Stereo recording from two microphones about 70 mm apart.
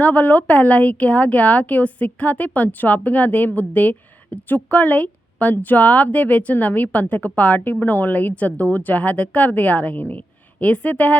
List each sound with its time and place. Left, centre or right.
0.0 s speech: left